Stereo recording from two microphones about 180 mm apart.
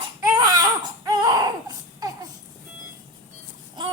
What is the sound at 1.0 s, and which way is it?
Baby cry, 20° right (ahead or behind).